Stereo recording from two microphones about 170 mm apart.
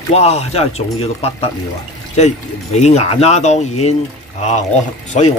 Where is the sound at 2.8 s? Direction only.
40° left (ahead or behind).